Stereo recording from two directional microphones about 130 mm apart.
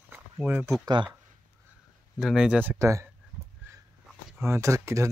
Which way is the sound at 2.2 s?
5° right (ahead or behind).